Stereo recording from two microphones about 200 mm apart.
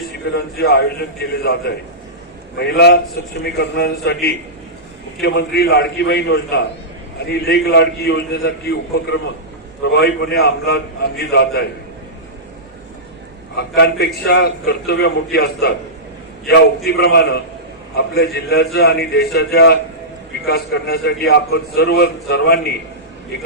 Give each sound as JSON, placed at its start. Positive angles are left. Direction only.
{"t": 0.3, "sound": "a man's voice", "side_deg": 55}
{"t": 13.6, "sound": "a man's voice", "side_deg": 55}